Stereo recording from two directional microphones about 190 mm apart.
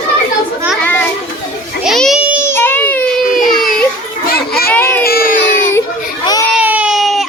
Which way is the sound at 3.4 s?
Centre (ahead or behind).